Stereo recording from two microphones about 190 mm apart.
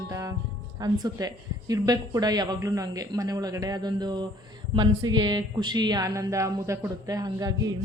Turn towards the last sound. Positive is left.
turn(degrees=-20)  # may be behind; listen again after turning